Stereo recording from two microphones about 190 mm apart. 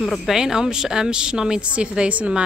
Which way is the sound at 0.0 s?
Centre (ahead or behind).